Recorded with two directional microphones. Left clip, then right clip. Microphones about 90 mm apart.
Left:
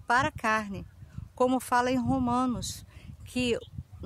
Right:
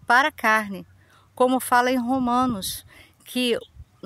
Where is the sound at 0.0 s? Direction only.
50° right (ahead or behind).